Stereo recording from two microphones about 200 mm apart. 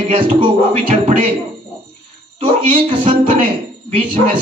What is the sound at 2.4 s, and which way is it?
Speech, 25° right (ahead or behind).